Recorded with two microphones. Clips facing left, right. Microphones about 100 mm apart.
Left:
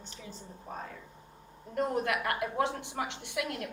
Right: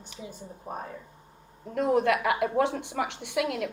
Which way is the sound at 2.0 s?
75° right (ahead or behind).